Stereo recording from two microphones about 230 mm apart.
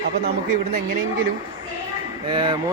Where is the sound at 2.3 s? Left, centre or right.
Centre.